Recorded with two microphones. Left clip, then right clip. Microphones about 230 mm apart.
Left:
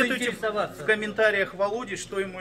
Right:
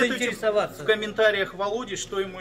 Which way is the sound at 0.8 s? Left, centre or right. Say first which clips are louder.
Left 1 dB; centre.